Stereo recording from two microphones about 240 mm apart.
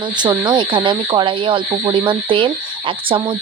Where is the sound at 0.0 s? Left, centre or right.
Centre.